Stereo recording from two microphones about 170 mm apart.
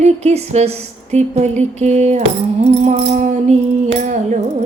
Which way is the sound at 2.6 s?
40° right (ahead or behind).